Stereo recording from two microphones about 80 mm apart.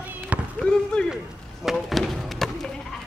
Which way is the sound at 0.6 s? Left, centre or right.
Centre.